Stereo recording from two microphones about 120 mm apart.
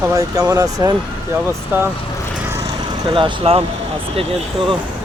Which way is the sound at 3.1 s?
50° right (ahead or behind).